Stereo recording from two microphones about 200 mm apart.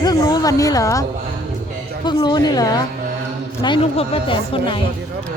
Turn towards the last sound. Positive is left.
turn(degrees=25)  # may be behind; listen again after turning